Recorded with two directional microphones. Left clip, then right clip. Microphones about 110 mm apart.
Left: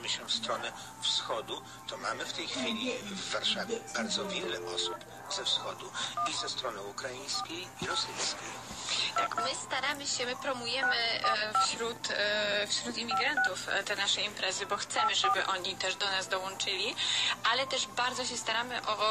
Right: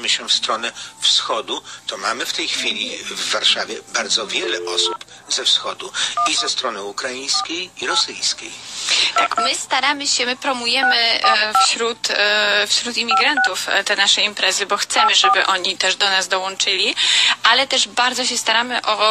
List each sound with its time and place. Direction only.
0.0 s speech: 40° right (ahead or behind)